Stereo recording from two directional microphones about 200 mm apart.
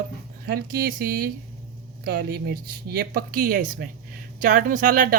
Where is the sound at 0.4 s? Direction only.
50° right (ahead or behind).